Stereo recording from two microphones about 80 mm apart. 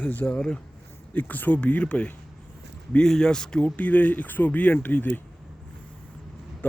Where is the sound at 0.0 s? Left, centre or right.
Centre.